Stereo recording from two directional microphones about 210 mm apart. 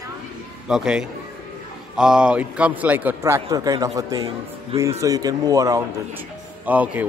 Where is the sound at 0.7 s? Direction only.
5° right (ahead or behind).